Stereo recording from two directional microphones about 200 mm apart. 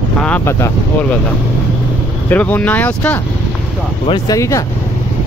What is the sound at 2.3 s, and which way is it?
Speech, 10° left (ahead or behind).